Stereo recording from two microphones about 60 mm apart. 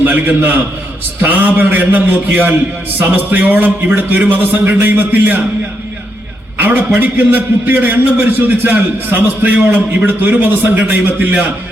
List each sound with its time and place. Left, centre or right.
0.0 s a man's voice: right
6.6 s a man's voice: right